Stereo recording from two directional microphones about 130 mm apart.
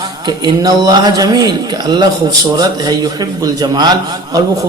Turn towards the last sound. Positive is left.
turn(degrees=-30)  # may be behind; listen again after turning